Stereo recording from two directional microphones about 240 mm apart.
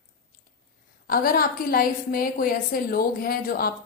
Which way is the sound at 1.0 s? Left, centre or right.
Left.